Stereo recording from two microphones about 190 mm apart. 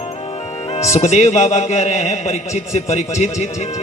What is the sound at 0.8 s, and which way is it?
Speech, 15° left (ahead or behind).